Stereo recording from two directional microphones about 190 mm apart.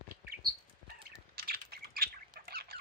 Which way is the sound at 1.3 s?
55° right (ahead or behind).